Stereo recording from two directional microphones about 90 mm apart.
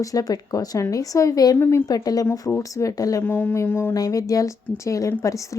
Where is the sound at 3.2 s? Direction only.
25° left (ahead or behind).